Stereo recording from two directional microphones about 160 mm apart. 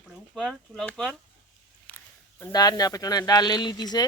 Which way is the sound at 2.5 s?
25° left (ahead or behind).